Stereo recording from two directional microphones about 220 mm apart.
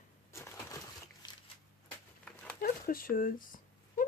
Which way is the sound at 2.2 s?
5° left (ahead or behind).